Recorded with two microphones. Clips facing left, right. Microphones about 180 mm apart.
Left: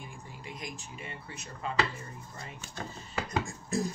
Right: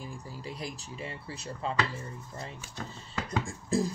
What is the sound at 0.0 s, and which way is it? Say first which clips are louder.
Speech: right 5 dB; 35° right (ahead or behind).